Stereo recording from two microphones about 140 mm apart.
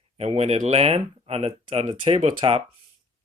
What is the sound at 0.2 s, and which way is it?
Speech, 50° right (ahead or behind).